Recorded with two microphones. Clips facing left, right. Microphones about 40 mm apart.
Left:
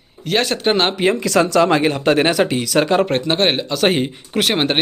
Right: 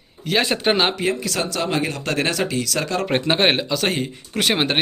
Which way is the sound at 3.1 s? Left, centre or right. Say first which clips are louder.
Left 1 dB; centre.